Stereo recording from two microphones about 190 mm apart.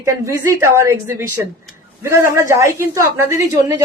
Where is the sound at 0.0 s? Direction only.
15° right (ahead or behind).